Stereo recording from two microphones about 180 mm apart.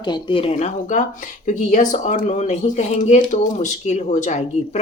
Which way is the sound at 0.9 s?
45° left (ahead or behind).